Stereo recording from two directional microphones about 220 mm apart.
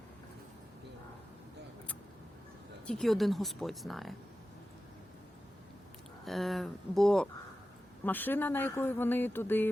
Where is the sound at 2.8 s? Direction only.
Centre (ahead or behind).